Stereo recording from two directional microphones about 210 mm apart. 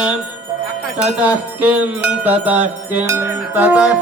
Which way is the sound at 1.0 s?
5° right (ahead or behind).